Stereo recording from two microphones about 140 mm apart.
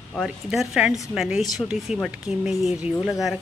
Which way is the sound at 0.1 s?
Centre (ahead or behind).